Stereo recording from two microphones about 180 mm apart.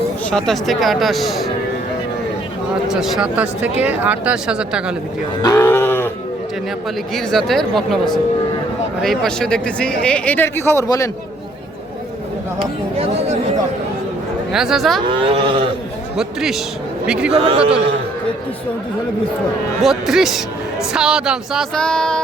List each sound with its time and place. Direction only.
0.3 s speech: 5° left (ahead or behind)
2.8 s speech: centre (ahead or behind)
5.4 s speech: 15° left (ahead or behind)
7.1 s speech: centre (ahead or behind)
9.0 s speech: centre (ahead or behind); by 11.1 s 15° left (ahead or behind)
12.5 s speech: 35° right (ahead or behind)
14.5 s speech: centre (ahead or behind)
15.1 s speech: 30° right (ahead or behind)
16.1 s a man's voice: centre (ahead or behind)
17.3 s speech: 30° right (ahead or behind)
19.8 s speech: centre (ahead or behind)